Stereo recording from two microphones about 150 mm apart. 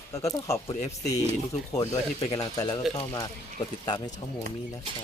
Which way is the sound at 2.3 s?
25° left (ahead or behind).